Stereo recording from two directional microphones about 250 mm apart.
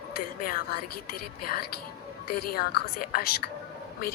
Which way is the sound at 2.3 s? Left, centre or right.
Left.